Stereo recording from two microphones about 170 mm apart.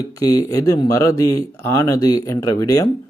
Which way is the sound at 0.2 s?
20° left (ahead or behind).